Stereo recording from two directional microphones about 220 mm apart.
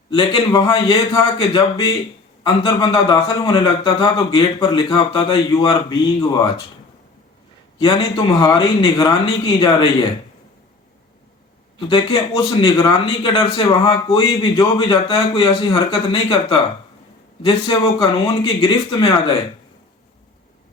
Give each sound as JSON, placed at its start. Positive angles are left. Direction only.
{"t": 0.1, "sound": "a man's voice", "side_deg": 25}
{"t": 7.8, "sound": "a man's voice", "side_deg": 20}
{"t": 11.9, "sound": "a man's voice", "side_deg": 15}